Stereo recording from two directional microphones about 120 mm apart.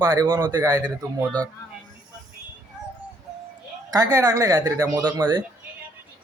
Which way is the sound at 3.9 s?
30° right (ahead or behind).